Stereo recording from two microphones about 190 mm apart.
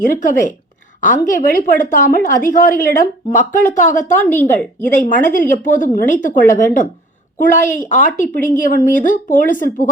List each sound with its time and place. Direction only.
0.1 s a woman's voice: 45° left (ahead or behind)
4.2 s speech: 10° left (ahead or behind)
4.9 s a woman's voice: 40° left (ahead or behind)